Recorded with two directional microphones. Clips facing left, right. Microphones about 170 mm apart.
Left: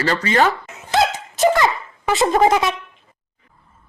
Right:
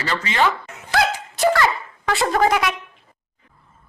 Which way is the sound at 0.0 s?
40° left (ahead or behind).